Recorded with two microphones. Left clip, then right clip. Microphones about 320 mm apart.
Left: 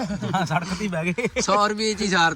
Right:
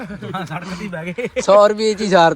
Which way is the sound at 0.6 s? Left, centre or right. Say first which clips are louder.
Even; centre.